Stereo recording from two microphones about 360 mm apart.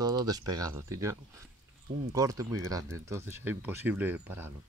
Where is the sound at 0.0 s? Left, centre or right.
Centre.